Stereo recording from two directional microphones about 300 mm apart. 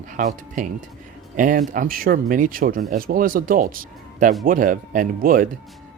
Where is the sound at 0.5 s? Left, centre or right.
Right.